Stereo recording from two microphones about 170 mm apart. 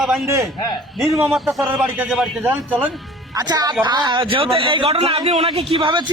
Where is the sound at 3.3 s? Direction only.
20° right (ahead or behind).